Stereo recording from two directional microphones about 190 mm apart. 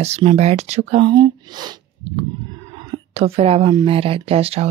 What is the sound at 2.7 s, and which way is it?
A woman's voice, 30° right (ahead or behind).